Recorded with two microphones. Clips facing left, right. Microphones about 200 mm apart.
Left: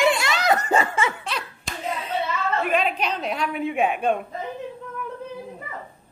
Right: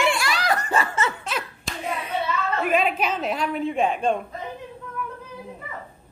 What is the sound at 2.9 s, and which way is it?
A woman's voice, 5° right (ahead or behind).